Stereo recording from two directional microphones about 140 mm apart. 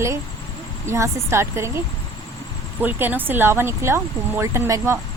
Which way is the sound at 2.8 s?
15° right (ahead or behind).